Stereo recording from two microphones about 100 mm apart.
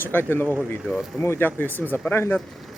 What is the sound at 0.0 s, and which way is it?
Speech, 20° left (ahead or behind).